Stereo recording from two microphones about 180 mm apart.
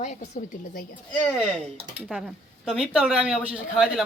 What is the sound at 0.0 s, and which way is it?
Speech, 40° left (ahead or behind).